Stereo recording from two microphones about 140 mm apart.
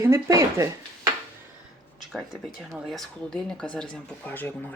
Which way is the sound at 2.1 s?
Centre (ahead or behind).